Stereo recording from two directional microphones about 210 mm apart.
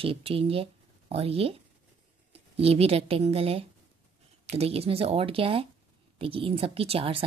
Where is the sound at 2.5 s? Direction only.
30° right (ahead or behind).